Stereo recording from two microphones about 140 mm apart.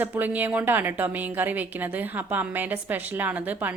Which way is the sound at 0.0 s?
15° right (ahead or behind).